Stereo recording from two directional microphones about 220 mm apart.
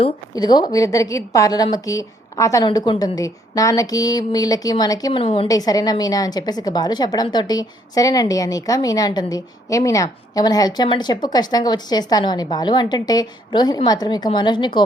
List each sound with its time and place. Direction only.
0.0 s a woman's voice: 20° left (ahead or behind)